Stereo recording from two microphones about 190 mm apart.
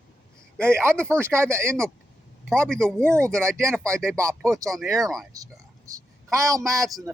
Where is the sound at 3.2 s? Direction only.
15° right (ahead or behind).